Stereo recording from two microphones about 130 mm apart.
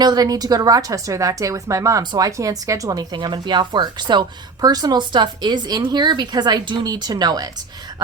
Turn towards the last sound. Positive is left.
turn(degrees=-30)  # may be behind; listen again after turning